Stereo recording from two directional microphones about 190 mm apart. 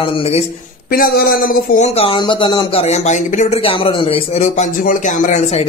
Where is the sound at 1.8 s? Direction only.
30° left (ahead or behind).